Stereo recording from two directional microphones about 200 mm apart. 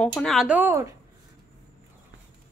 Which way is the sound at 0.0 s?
Centre (ahead or behind).